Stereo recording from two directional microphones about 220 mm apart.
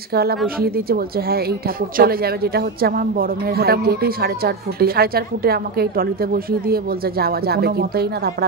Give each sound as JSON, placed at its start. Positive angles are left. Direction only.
{"t": 0.1, "sound": "a woman's voice", "side_deg": -45}